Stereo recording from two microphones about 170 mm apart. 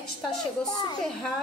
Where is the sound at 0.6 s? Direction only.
25° left (ahead or behind).